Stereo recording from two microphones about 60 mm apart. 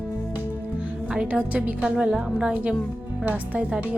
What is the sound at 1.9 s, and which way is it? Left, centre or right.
Speech, centre.